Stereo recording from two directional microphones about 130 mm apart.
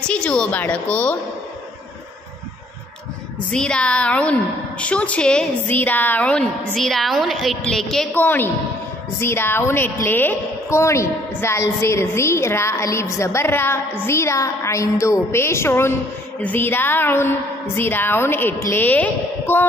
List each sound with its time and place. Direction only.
0.0 s a woman's voice: 10° left (ahead or behind)
3.5 s a woman's voice: 5° left (ahead or behind)